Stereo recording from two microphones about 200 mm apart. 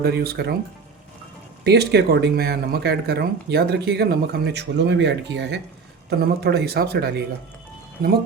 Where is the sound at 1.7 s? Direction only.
55° right (ahead or behind).